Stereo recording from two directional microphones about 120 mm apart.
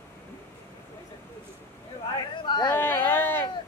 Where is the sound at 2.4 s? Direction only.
40° left (ahead or behind).